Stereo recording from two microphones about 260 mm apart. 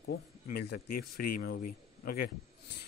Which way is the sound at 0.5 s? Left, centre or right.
Left.